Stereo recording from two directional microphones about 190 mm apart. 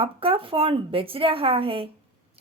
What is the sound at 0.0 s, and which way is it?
Speech, 30° right (ahead or behind).